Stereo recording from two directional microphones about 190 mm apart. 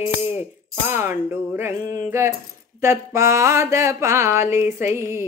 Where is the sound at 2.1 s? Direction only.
15° right (ahead or behind).